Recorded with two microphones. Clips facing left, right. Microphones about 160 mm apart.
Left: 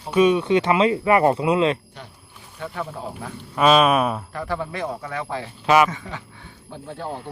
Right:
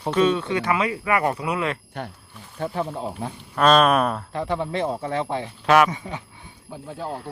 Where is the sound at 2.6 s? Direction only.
30° right (ahead or behind).